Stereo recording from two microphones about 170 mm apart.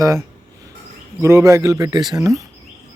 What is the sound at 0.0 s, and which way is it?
Speech, 15° right (ahead or behind).